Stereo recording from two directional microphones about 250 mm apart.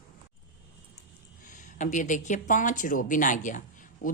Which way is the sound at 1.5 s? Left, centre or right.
Left.